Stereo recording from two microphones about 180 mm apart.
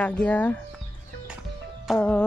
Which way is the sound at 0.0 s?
10° left (ahead or behind).